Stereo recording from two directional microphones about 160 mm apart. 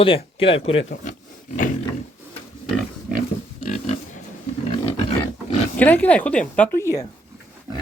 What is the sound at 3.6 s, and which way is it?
Pig, 45° left (ahead or behind).